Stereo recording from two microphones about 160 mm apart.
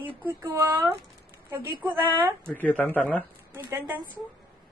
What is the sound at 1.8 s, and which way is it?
Speech, 10° right (ahead or behind).